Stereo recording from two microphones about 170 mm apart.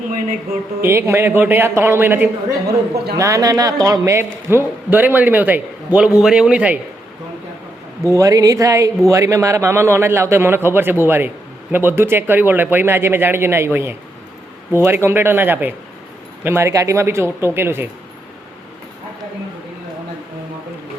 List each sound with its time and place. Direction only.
0.8 s a man's voice: 15° right (ahead or behind)
8.0 s a man's voice: 20° right (ahead or behind)